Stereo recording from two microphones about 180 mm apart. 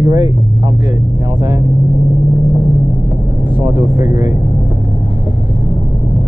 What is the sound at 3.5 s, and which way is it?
Speech, 15° right (ahead or behind).